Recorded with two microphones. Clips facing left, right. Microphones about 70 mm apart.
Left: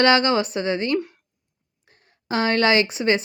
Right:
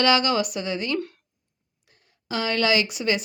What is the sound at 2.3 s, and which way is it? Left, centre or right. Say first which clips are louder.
Speech: left 4 dB; left.